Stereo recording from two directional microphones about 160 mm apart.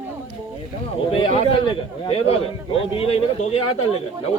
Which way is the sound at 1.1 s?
35° left (ahead or behind).